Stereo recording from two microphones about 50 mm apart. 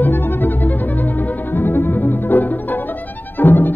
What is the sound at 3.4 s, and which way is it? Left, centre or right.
Violin, left.